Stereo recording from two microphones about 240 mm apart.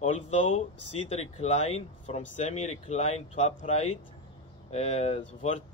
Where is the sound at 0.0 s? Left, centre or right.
Left.